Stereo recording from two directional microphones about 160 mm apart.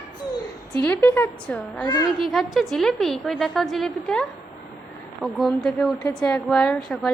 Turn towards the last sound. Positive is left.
turn(degrees=5)  # may be behind; listen again after turning